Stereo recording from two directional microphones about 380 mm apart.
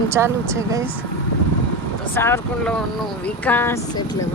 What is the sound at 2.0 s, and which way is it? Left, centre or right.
Speech, centre.